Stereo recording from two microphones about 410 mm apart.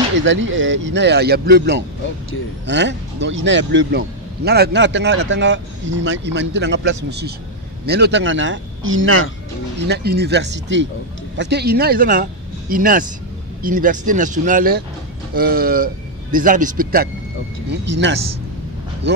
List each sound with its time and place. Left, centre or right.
0.2 s a man's voice: right